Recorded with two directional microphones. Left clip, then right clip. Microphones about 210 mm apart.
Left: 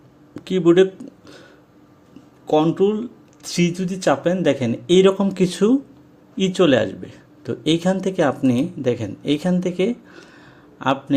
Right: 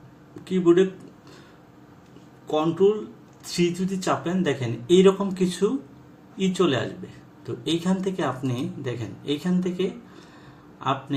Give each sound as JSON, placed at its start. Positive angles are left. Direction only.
{"t": 0.4, "sound": "speech", "side_deg": 45}
{"t": 2.5, "sound": "speech", "side_deg": 45}